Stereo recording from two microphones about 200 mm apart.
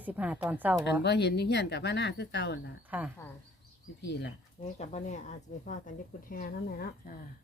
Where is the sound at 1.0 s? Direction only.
55° left (ahead or behind).